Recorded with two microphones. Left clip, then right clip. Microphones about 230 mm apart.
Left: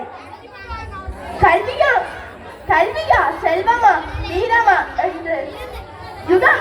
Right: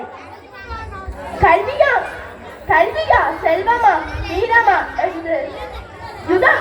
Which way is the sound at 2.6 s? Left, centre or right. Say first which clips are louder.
Right 1 dB; left.